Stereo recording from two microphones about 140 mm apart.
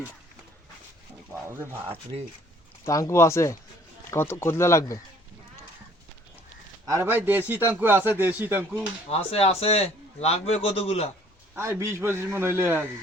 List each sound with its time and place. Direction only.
1.3 s speech: 15° right (ahead or behind)
2.8 s speech: 20° left (ahead or behind)
6.8 s a man's voice: 20° right (ahead or behind)
9.0 s a man's voice: 45° left (ahead or behind)
11.5 s a man's voice: 20° right (ahead or behind)